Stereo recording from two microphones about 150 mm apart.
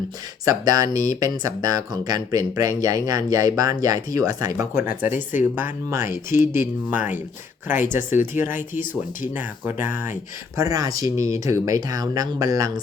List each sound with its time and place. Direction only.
0.4 s speech: 25° right (ahead or behind)
6.1 s speech: 60° left (ahead or behind)
7.9 s speech: 15° right (ahead or behind)